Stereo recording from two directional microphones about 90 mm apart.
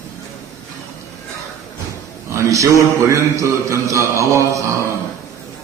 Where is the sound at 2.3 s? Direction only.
35° right (ahead or behind).